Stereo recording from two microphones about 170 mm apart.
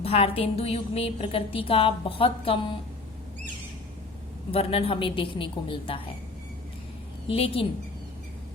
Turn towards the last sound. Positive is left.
turn(degrees=35)  # may be behind; listen again after turning